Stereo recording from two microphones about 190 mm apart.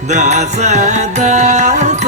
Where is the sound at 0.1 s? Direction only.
35° right (ahead or behind).